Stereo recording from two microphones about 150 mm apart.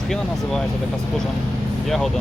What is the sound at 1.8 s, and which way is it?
Speech, centre (ahead or behind).